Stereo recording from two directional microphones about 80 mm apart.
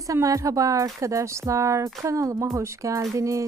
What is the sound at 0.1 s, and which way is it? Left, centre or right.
Speech, right.